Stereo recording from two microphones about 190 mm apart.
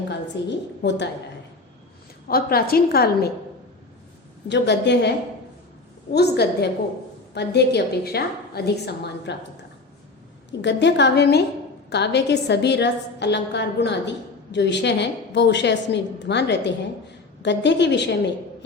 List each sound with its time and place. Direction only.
0.4 s a woman's voice: 65° left (ahead or behind)
2.2 s a woman's voice: 55° left (ahead or behind)
4.4 s a woman's voice: 65° left (ahead or behind)
10.6 s a woman's voice: 65° left (ahead or behind)